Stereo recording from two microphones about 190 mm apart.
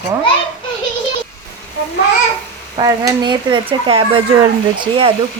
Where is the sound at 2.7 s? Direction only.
20° right (ahead or behind).